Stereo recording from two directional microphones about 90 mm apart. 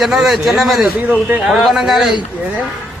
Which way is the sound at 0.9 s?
20° right (ahead or behind).